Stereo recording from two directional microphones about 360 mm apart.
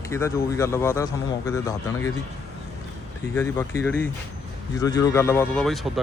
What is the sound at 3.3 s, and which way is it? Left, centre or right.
Speech, centre.